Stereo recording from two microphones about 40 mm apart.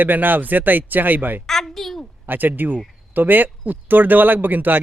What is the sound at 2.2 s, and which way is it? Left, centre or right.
Speech, right.